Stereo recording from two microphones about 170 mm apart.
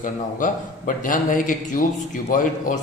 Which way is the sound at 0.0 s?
50° left (ahead or behind).